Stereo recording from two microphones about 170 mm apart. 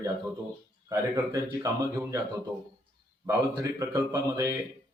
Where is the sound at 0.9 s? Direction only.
20° right (ahead or behind).